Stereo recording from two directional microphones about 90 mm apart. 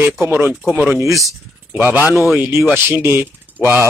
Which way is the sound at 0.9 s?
35° right (ahead or behind).